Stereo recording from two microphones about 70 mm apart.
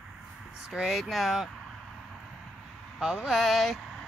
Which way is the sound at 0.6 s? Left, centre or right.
Centre.